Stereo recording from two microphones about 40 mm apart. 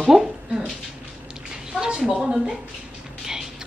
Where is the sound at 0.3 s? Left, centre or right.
Right.